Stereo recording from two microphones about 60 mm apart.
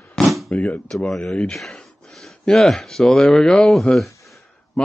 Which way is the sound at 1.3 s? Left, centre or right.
Centre.